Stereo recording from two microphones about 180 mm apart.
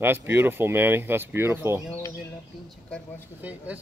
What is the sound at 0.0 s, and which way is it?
Speech, 10° right (ahead or behind).